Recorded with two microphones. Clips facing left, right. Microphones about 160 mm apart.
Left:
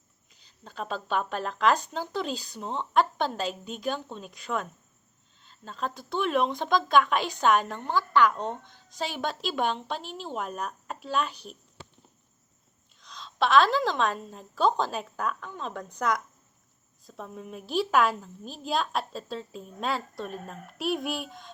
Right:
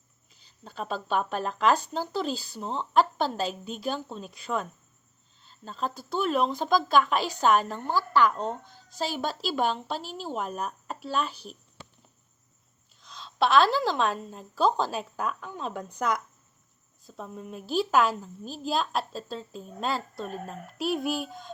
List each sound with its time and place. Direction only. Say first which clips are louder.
0.6 s a woman's voice: right 1 dB; 5° right (ahead or behind)
13.0 s a woman's voice: right 1 dB; 5° right (ahead or behind)